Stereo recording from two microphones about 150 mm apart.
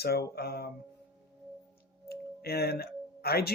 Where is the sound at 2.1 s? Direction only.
90° left.